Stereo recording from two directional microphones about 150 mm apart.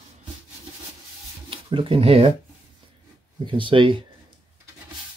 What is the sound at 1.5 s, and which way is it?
Speech, 35° right (ahead or behind).